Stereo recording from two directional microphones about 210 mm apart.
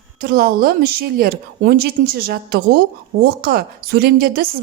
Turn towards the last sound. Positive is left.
turn(degrees=-45)  # may be behind; listen again after turning